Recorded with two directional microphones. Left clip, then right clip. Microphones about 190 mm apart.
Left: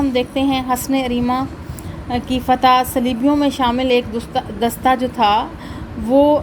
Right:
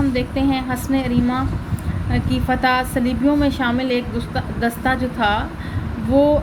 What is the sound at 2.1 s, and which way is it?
A woman's voice, 40° left (ahead or behind).